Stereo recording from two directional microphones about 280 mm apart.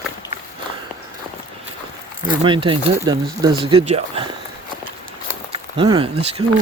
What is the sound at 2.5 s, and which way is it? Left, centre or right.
Speech, centre.